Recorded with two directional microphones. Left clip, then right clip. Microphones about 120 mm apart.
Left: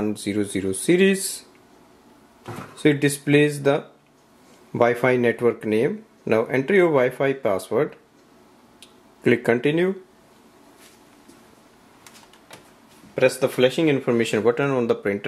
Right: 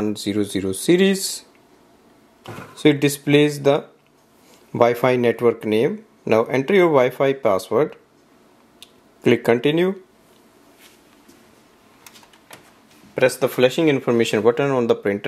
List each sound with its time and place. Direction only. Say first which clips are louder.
0.0 s speech: right 2 dB; 25° right (ahead or behind)
2.4 s speech: right 3 dB; 25° right (ahead or behind)
9.2 s speech: right 3 dB; 25° right (ahead or behind)
13.1 s speech: right 1 dB; 35° right (ahead or behind)